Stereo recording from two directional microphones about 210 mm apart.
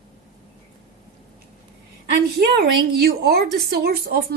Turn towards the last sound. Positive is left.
turn(degrees=-50)  # may be behind; listen again after turning